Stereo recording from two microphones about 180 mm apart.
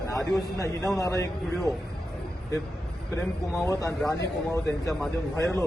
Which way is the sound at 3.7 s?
15° left (ahead or behind).